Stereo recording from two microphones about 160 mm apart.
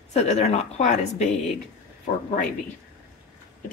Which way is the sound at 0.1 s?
45° left (ahead or behind).